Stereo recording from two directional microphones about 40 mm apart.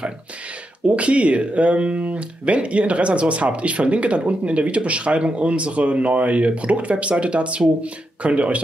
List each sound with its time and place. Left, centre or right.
0.8 s speech: right